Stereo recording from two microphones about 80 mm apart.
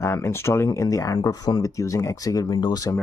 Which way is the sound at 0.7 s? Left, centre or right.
Left.